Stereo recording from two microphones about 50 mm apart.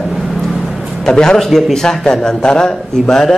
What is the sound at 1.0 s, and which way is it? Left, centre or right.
Speech, centre.